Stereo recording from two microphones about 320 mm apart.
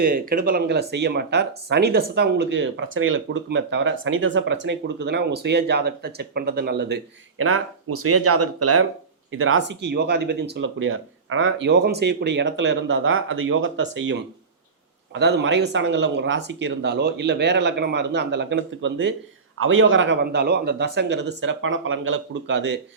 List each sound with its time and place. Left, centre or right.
0.0 s speech: right
15.1 s speech: right